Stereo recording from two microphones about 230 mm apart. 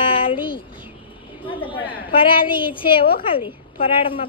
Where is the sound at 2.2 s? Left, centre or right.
Left.